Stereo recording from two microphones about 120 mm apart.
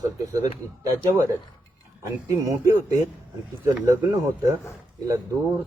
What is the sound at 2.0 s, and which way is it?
Speech, 25° right (ahead or behind).